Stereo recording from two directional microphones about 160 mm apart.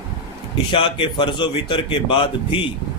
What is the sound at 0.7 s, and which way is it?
A man's voice, 30° left (ahead or behind).